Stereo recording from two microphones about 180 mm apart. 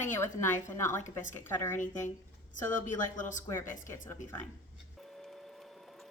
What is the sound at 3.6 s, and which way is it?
Speech, 45° left (ahead or behind).